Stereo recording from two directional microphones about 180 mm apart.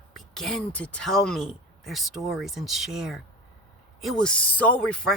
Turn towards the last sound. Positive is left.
turn(degrees=5)  # may be behind; listen again after turning